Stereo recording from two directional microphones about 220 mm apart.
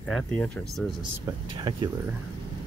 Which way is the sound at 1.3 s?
20° right (ahead or behind).